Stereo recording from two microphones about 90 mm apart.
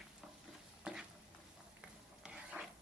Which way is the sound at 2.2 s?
10° right (ahead or behind).